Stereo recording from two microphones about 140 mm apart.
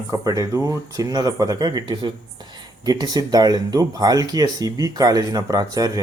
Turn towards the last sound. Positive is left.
turn(degrees=-25)  # may be behind; listen again after turning